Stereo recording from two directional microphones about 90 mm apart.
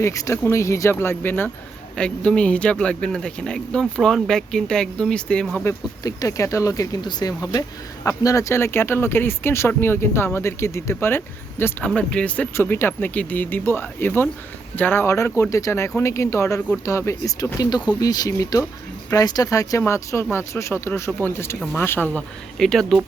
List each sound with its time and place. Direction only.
0.0 s speech: 35° left (ahead or behind)
2.0 s speech: 10° left (ahead or behind)
5.6 s speech: 40° left (ahead or behind)
11.9 s speech: 15° left (ahead or behind)
12.5 s speech: 25° left (ahead or behind)
22.5 s speech: 5° left (ahead or behind)